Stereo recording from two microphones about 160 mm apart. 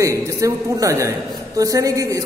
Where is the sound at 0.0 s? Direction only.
20° right (ahead or behind).